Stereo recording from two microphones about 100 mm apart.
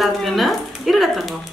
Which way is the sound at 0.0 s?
Centre (ahead or behind).